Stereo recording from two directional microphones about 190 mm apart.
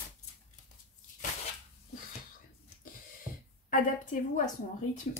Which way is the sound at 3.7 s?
40° left (ahead or behind).